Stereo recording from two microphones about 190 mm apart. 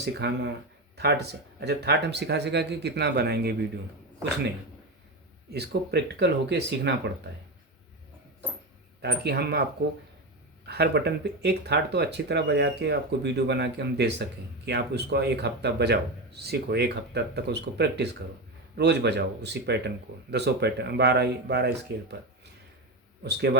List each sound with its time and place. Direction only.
0.0 s speech: 60° right (ahead or behind)
5.5 s speech: 60° right (ahead or behind)
9.0 s speech: 60° right (ahead or behind)
10.7 s speech: 60° right (ahead or behind)